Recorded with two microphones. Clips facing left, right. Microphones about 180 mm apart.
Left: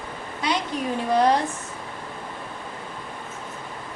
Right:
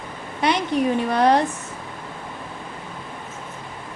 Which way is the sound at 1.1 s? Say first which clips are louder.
Left 1 dB; 65° right (ahead or behind).